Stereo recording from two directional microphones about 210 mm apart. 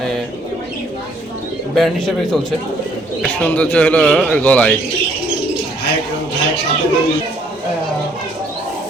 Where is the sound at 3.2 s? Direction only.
5° left (ahead or behind).